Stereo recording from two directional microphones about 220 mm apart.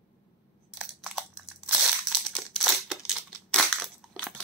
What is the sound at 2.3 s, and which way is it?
Crushing, centre (ahead or behind).